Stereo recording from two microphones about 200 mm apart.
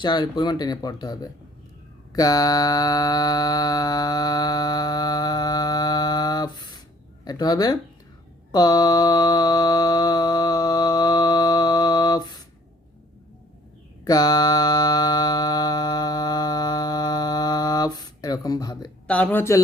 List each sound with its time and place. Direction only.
0.0 s speech: 20° left (ahead or behind)
2.1 s a sound: 20° left (ahead or behind)
7.3 s speech: 20° left (ahead or behind)
8.5 s mantra: 20° left (ahead or behind)
14.0 s music: 20° left (ahead or behind)
19.0 s speech: 5° left (ahead or behind)